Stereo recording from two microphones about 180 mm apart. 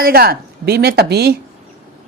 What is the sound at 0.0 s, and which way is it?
Speech, 55° right (ahead or behind).